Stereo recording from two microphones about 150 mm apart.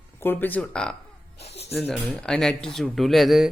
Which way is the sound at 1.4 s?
45° left (ahead or behind).